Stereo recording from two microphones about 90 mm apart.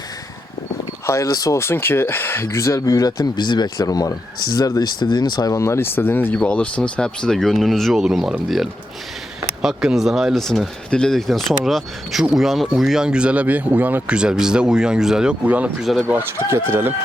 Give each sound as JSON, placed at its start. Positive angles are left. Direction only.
{"t": 1.0, "sound": "speech", "side_deg": 35}
{"t": 3.8, "sound": "speech", "side_deg": 40}
{"t": 5.5, "sound": "speech", "side_deg": 30}
{"t": 6.4, "sound": "speech", "side_deg": 10}
{"t": 15.8, "sound": "speech", "side_deg": -5}
{"t": 16.5, "sound": "speech", "side_deg": -25}